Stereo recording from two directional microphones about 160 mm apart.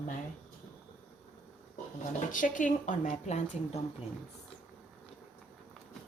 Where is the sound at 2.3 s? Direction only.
55° left (ahead or behind).